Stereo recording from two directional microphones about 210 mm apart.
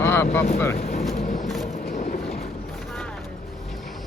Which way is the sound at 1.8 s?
45° left (ahead or behind).